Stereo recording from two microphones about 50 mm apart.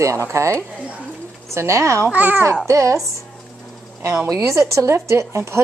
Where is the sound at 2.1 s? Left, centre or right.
Right.